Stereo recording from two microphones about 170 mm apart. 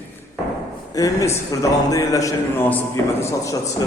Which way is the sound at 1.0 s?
20° left (ahead or behind).